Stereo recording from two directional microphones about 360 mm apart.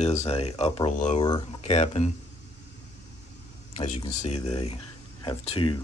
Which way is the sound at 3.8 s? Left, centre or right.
Centre.